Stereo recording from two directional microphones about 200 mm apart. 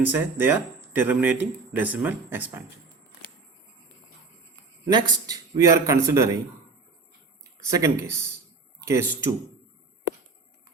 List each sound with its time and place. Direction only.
0.0 s speech: 10° right (ahead or behind)
4.9 s speech: 20° right (ahead or behind)
7.7 s speech: 15° right (ahead or behind)